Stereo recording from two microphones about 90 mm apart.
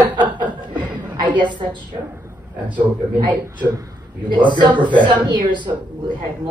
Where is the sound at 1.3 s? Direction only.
60° right (ahead or behind).